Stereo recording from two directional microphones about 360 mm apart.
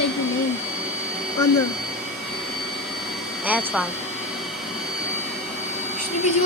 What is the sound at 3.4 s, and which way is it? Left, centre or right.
Speech, centre.